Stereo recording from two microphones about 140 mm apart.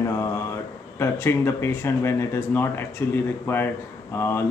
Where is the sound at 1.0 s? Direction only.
15° left (ahead or behind).